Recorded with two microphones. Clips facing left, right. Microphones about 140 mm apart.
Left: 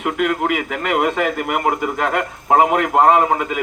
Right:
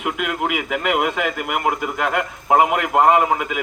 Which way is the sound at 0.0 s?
5° right (ahead or behind).